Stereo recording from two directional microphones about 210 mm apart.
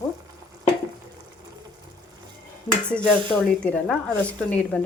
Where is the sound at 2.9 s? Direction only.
5° left (ahead or behind).